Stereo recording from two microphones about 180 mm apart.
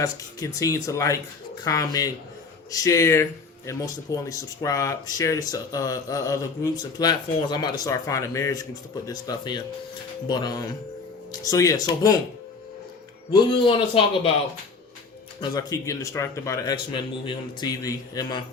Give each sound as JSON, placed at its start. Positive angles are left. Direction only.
{"t": 0.0, "sound": "speech", "side_deg": 20}
{"t": 13.3, "sound": "speech", "side_deg": 30}
{"t": 15.4, "sound": "speech", "side_deg": 20}